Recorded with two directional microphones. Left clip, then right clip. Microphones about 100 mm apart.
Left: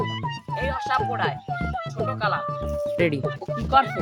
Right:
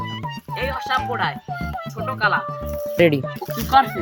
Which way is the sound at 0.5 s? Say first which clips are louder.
Right 2 dB; 5° left (ahead or behind).